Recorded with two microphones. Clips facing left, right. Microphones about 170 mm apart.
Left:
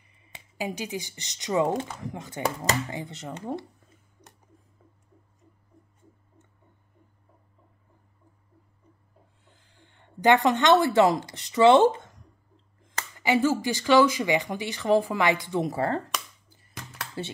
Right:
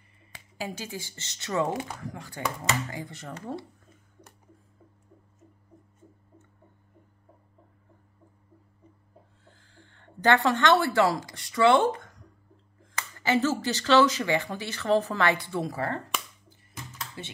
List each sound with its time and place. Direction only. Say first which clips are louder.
0.3 s speech: left 3 dB; 15° left (ahead or behind)
1.7 s speech: left 3 dB; 10° right (ahead or behind)
2.0 s speech: left 3 dB; 20° left (ahead or behind)
9.4 s a sound: right 3 dB; 20° left (ahead or behind)
11.3 s speech: left 4 dB; 20° left (ahead or behind)
13.2 s speech: left 2 dB; 15° left (ahead or behind)
16.7 s a sound: left 1 dB; 70° left (ahead or behind)